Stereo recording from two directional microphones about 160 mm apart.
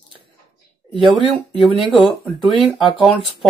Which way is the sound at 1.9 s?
Centre (ahead or behind).